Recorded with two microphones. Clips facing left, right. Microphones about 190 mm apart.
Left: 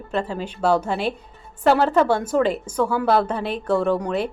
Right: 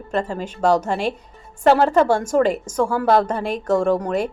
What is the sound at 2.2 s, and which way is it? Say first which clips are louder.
A woman's voice: right 2 dB; 45° right (ahead or behind).